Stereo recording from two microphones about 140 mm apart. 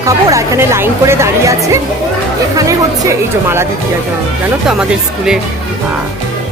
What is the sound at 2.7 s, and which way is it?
Speech, 20° right (ahead or behind).